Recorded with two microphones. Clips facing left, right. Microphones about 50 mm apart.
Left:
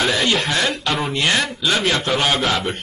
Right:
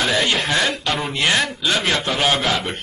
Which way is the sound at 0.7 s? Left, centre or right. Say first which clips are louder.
Left 1 dB; left.